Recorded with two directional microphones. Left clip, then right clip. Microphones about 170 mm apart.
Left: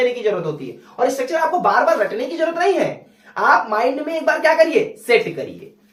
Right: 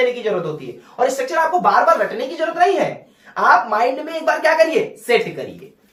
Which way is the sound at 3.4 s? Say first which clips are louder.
Right 1 dB; 20° left (ahead or behind).